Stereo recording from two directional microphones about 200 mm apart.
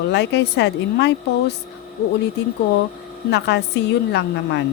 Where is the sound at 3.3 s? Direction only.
55° left (ahead or behind).